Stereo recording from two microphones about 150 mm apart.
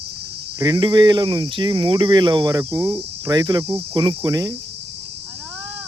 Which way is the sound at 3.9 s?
30° right (ahead or behind).